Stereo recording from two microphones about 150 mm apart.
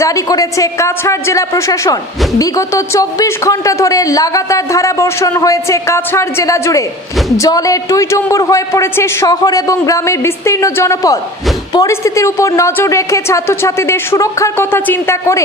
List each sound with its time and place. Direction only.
0.0 s a woman's voice: 20° left (ahead or behind)